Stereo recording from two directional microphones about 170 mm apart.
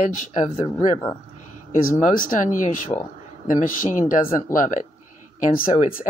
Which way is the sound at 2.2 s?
50° left (ahead or behind).